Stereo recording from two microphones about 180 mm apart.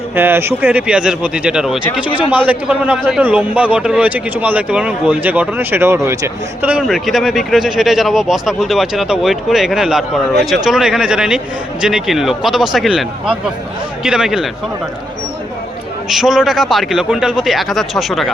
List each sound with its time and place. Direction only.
0.2 s a man's voice: 10° right (ahead or behind)
16.0 s a man's voice: centre (ahead or behind)